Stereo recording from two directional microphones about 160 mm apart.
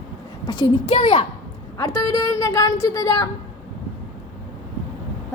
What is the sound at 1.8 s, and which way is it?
A woman's voice, 20° left (ahead or behind).